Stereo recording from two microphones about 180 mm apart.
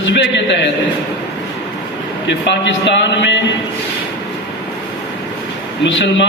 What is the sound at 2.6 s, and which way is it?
Speech, 80° left.